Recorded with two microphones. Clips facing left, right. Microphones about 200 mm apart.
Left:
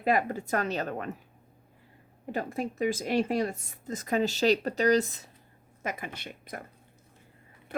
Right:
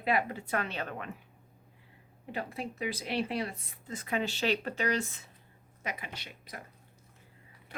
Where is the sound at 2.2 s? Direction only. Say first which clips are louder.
Left 5 dB; 45° left (ahead or behind).